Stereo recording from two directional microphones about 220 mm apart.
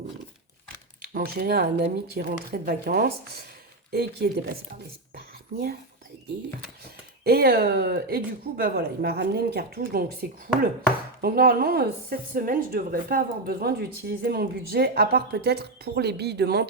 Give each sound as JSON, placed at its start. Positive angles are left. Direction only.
{"t": 1.1, "sound": "a woman's voice", "side_deg": -45}
{"t": 5.1, "sound": "a sound", "side_deg": -45}
{"t": 7.3, "sound": "a woman's voice", "side_deg": -45}